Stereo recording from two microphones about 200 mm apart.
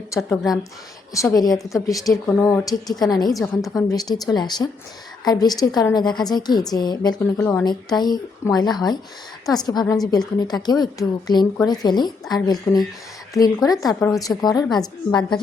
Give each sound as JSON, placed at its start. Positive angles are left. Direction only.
{"t": 0.2, "sound": "a woman's voice", "side_deg": 0}
{"t": 1.1, "sound": "a woman's voice", "side_deg": 15}